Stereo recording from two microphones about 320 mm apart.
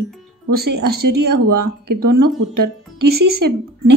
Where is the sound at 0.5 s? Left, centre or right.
Right.